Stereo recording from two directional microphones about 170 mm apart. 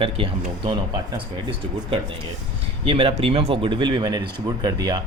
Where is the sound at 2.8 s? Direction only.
35° right (ahead or behind).